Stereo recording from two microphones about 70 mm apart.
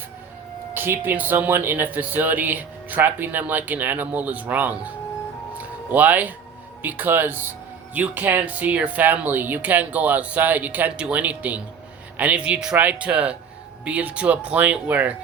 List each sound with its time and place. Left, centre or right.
0.7 s speech: right
5.5 s music: right
6.8 s a man's voice: right